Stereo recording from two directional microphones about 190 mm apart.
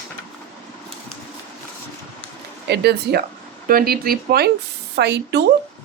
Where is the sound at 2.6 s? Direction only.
60° right (ahead or behind).